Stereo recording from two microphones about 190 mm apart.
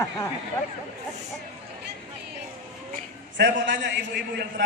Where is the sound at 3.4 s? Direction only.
70° right (ahead or behind).